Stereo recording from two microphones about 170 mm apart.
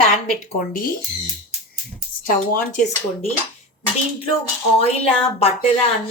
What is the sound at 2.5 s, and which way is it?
Speech, 50° left (ahead or behind).